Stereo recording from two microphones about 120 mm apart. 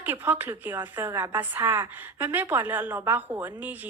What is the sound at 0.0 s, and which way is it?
A woman's voice, 15° right (ahead or behind).